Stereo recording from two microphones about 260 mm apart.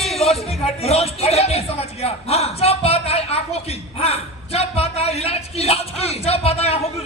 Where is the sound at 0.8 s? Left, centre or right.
Left.